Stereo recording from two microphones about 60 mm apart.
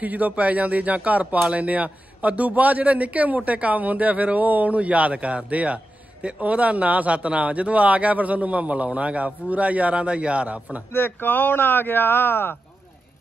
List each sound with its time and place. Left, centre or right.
0.0 s speech: right
10.9 s speech: left